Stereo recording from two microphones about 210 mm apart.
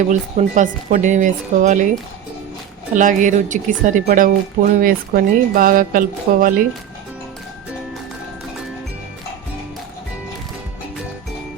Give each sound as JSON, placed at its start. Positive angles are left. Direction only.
{"t": 0.0, "sound": "speech", "side_deg": -35}
{"t": 2.9, "sound": "speech", "side_deg": -35}